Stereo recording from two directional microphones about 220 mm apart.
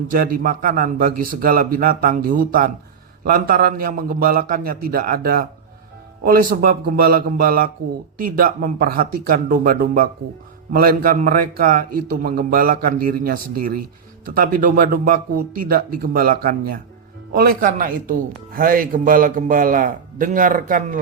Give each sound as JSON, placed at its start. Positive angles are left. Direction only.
{"t": 0.1, "sound": "speech", "side_deg": -40}